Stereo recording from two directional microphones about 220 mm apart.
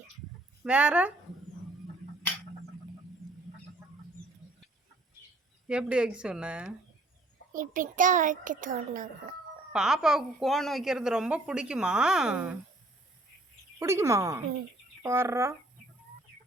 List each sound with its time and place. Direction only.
0.6 s a woman's voice: 5° right (ahead or behind)
5.6 s a woman's voice: 5° right (ahead or behind)
7.5 s a child's voice: 40° right (ahead or behind)
9.7 s a woman's voice: 5° right (ahead or behind)
13.7 s speech: 10° right (ahead or behind)